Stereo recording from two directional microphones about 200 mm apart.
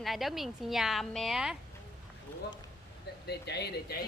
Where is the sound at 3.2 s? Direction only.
55° left (ahead or behind).